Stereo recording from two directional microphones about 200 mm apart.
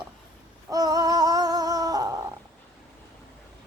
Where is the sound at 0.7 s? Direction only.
20° right (ahead or behind).